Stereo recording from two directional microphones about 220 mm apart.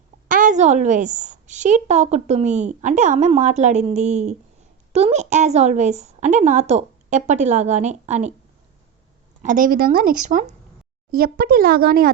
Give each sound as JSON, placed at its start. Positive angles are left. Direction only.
{"t": 0.3, "sound": "a woman's voice", "side_deg": -35}
{"t": 9.4, "sound": "a woman's voice", "side_deg": -35}